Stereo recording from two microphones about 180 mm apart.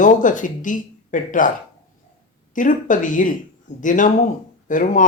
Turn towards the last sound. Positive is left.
turn(degrees=45)  # may be behind; listen again after turning